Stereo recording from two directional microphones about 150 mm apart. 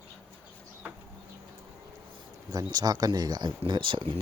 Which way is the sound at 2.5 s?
25° right (ahead or behind).